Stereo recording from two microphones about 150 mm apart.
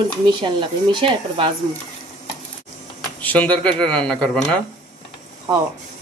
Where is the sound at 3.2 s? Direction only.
10° left (ahead or behind).